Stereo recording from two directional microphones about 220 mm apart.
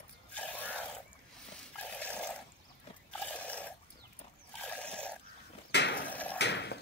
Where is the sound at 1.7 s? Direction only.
5° left (ahead or behind).